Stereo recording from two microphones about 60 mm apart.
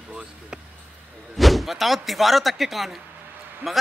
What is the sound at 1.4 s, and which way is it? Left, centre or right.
A man's voice, centre.